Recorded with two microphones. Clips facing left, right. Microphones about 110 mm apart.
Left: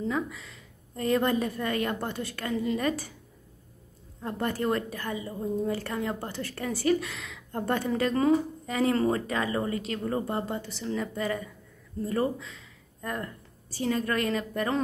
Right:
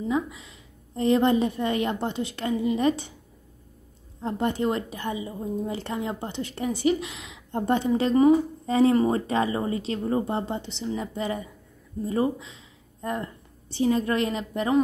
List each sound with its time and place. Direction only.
0.0 s a woman's voice: 20° right (ahead or behind)
4.2 s a woman's voice: 20° right (ahead or behind)